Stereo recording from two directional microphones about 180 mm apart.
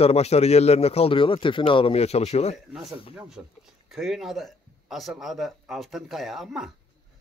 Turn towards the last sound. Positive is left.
turn(degrees=0)  # may be behind; listen again after turning